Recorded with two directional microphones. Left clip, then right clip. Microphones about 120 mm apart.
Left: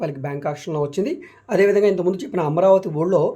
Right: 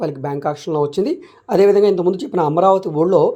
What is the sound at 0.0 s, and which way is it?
Speech, 35° right (ahead or behind).